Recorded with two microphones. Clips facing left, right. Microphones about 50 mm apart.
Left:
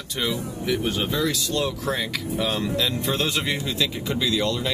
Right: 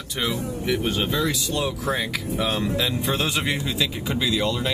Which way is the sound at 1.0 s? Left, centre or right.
Right.